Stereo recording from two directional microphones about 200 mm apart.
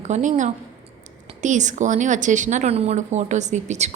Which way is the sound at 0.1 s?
40° right (ahead or behind).